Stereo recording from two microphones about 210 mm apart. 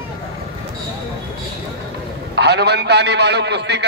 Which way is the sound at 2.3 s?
50° right (ahead or behind).